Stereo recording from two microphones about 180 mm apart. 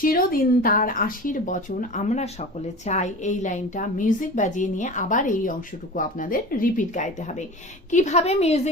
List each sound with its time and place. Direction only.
0.0 s a woman's voice: 55° left (ahead or behind); by 8.7 s 35° left (ahead or behind)